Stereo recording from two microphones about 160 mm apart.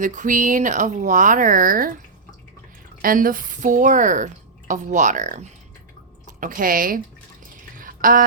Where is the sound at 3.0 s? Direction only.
60° right (ahead or behind).